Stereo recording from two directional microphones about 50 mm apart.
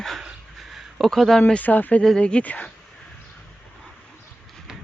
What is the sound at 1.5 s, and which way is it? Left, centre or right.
Speech, left.